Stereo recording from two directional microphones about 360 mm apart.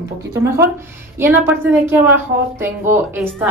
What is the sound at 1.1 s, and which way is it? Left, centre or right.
A woman's voice, centre.